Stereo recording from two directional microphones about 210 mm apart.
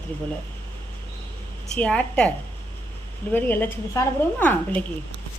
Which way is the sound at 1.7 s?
5° left (ahead or behind).